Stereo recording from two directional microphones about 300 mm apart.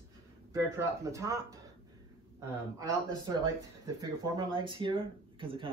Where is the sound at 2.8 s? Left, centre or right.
Centre.